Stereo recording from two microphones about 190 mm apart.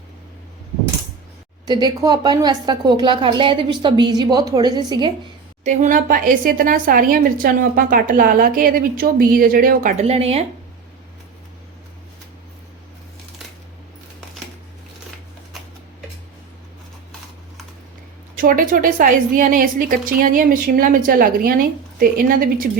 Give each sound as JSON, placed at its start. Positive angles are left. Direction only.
{"t": 1.6, "sound": "a woman's voice", "side_deg": -20}
{"t": 5.6, "sound": "a woman's voice", "side_deg": -40}
{"t": 18.3, "sound": "a woman's voice", "side_deg": -45}